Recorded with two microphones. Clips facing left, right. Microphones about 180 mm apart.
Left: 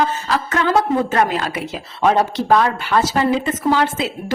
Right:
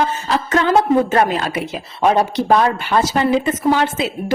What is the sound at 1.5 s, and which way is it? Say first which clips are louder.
A woman's voice: right 2 dB; 15° right (ahead or behind).